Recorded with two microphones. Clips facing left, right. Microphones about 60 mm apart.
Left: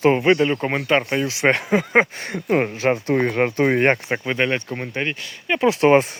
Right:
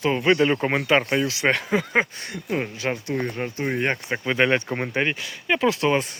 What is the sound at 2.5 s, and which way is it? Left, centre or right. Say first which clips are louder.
Speech: left 7 dB; left.